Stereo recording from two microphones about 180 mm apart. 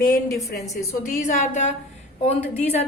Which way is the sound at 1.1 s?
45° left (ahead or behind).